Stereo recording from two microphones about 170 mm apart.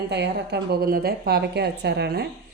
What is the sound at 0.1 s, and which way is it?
A woman's voice, 80° right.